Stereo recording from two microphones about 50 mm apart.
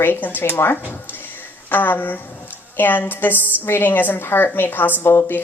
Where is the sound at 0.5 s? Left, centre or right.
Left.